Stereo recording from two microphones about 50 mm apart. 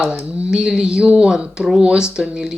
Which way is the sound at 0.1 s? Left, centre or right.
Right.